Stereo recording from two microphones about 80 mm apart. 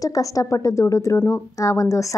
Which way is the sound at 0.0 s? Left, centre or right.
Left.